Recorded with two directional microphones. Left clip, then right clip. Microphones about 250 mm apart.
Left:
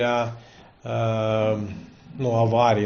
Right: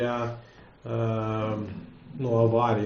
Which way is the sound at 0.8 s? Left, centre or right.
Left.